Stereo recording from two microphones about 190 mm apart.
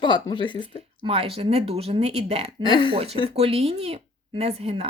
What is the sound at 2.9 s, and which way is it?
Speech, 30° right (ahead or behind).